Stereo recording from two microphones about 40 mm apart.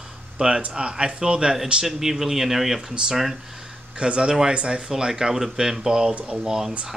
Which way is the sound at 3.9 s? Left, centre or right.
Right.